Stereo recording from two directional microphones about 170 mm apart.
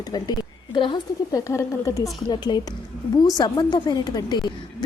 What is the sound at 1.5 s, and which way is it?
A woman's voice, 15° left (ahead or behind).